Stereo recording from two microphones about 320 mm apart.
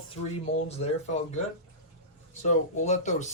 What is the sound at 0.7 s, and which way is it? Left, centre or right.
Speech, left.